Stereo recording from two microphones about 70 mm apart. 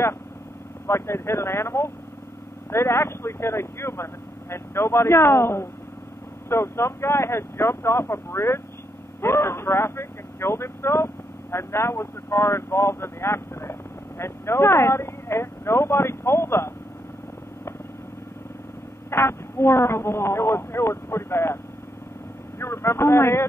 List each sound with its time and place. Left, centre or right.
0.8 s speech: left
19.0 s speech: left
22.6 s speech: left